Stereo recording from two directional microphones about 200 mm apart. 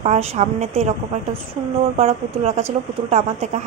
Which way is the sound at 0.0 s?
30° right (ahead or behind).